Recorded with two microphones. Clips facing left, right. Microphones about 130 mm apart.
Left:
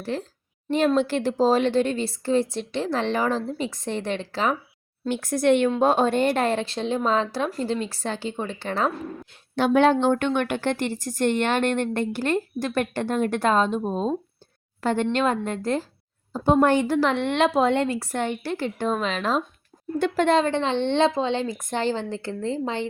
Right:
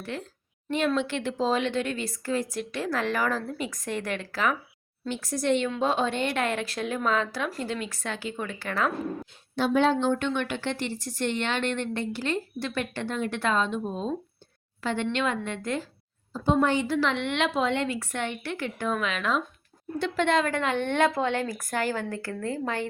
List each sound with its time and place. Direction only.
0.0 s a woman's voice: 35° left (ahead or behind)
5.0 s speech: 55° left (ahead or behind)
5.7 s a woman's voice: 45° left (ahead or behind); by 8.9 s 30° left (ahead or behind)
9.3 s a woman's voice: 60° left (ahead or behind); by 15.9 s 35° left (ahead or behind)
16.3 s a woman's voice: 50° left (ahead or behind); by 22.9 s 20° left (ahead or behind)